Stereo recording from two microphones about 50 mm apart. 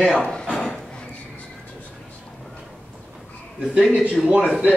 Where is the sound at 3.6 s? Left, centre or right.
Centre.